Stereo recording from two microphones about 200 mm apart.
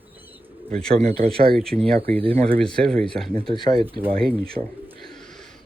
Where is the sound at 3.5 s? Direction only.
20° left (ahead or behind).